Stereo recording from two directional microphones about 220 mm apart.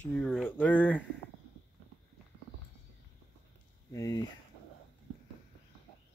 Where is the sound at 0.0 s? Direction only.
5° left (ahead or behind).